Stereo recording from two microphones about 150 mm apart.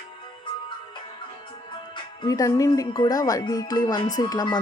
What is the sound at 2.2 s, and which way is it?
Speech, 25° left (ahead or behind).